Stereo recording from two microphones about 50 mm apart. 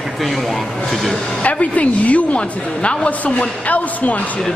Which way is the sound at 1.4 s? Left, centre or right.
Left.